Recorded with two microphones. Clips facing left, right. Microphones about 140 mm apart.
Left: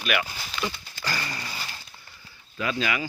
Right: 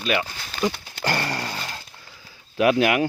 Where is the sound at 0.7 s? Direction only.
65° right (ahead or behind).